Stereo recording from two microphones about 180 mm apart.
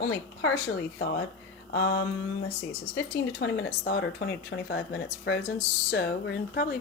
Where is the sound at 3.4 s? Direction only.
65° left (ahead or behind).